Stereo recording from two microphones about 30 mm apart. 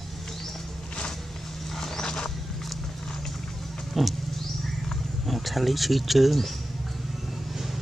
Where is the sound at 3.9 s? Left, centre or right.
Centre.